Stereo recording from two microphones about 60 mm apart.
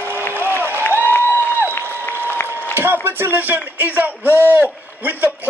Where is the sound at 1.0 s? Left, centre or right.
Left.